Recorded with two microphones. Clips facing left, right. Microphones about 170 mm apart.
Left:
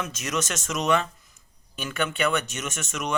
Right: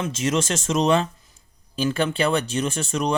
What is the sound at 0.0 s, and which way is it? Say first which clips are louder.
Speech: right 6 dB; 30° right (ahead or behind).